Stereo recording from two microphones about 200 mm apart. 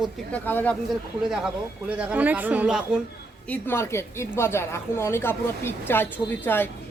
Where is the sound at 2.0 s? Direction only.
5° right (ahead or behind).